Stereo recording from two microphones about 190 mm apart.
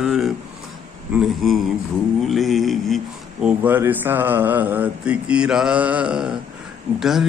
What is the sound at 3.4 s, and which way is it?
Speech, 10° right (ahead or behind).